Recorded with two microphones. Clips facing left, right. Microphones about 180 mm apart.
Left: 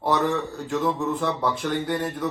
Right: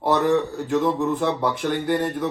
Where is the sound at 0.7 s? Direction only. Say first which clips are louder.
Right 3 dB; 20° right (ahead or behind).